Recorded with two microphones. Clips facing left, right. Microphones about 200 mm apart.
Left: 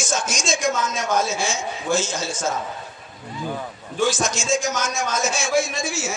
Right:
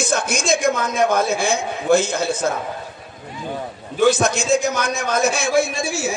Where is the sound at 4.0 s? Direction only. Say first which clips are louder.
Right 6 dB; 60° right (ahead or behind).